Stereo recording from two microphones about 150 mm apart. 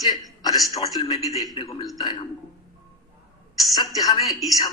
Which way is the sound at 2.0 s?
30° left (ahead or behind).